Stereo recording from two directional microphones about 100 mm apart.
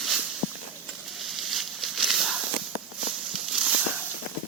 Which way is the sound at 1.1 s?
Centre (ahead or behind).